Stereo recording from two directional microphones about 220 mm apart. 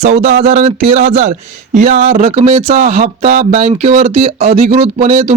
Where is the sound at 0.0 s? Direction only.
30° right (ahead or behind).